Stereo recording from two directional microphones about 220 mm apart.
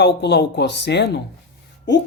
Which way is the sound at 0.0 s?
50° left (ahead or behind).